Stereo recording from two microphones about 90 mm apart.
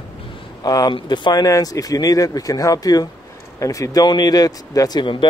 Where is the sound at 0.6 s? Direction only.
50° left (ahead or behind).